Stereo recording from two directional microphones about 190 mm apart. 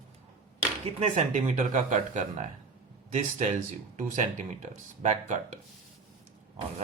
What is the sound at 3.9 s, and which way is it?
Speech, 40° right (ahead or behind).